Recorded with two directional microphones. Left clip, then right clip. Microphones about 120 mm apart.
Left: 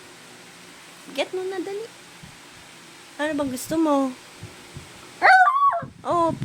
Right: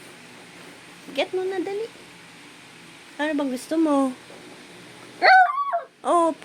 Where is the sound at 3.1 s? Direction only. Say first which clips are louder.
Even; 30° left (ahead or behind).